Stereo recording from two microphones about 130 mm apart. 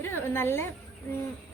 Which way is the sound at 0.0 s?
20° left (ahead or behind).